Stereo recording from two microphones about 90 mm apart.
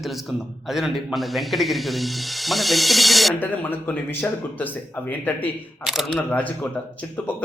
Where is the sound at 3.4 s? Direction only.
20° left (ahead or behind).